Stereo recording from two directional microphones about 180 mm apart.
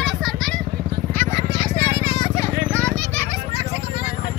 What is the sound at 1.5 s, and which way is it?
Vehicle, 30° left (ahead or behind).